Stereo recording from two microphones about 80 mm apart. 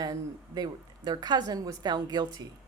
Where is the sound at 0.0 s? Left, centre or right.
Right.